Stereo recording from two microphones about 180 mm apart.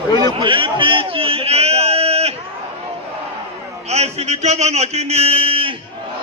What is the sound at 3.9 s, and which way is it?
A man's voice, 35° right (ahead or behind).